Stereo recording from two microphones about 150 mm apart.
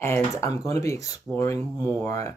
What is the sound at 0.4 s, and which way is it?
Speech, 20° left (ahead or behind).